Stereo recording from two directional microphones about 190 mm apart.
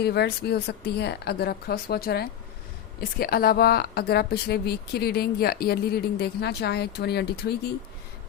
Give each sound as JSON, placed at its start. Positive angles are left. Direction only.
{"t": 0.0, "sound": "speech", "side_deg": 60}